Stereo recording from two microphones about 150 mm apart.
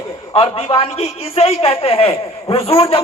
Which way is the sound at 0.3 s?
35° left (ahead or behind).